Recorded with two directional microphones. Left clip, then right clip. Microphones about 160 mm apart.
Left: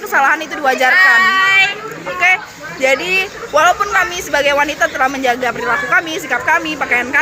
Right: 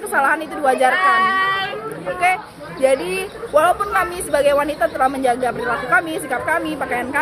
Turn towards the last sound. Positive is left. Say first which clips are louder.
# left 6 dB
turn(degrees=0)  # may be behind; listen again after turning